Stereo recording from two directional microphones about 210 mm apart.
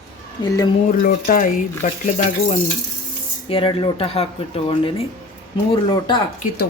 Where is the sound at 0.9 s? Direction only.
40° left (ahead or behind); by 6.2 s 20° left (ahead or behind).